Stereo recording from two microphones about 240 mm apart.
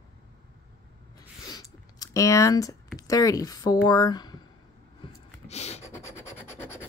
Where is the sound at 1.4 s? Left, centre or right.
Centre.